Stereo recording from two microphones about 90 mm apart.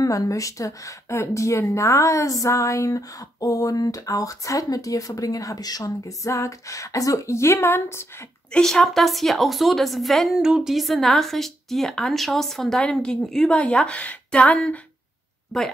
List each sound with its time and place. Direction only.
0.0 s speech: 40° left (ahead or behind)
8.5 s a woman's voice: 5° left (ahead or behind)
15.5 s a woman's voice: centre (ahead or behind)